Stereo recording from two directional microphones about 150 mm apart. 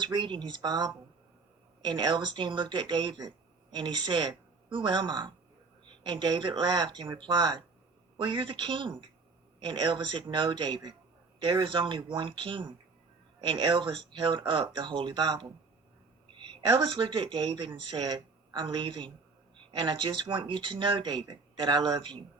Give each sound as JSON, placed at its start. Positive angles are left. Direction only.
{"t": 0.0, "sound": "speech", "side_deg": -30}
{"t": 16.5, "sound": "speech", "side_deg": -30}